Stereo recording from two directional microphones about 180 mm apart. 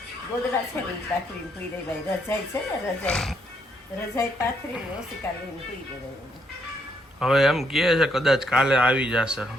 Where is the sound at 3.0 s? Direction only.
5° left (ahead or behind).